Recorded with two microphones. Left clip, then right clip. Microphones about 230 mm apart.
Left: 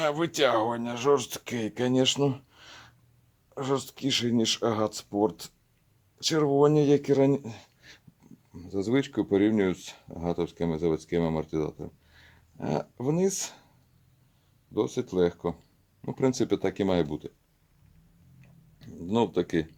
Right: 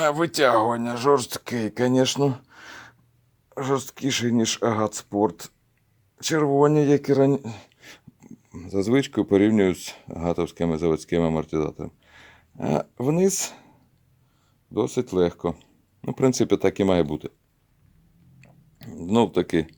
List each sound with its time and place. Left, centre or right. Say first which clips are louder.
0.0 s speech: right 5 dB; right
14.7 s speech: right 4 dB; right
18.3 s a sound: right 7 dB; right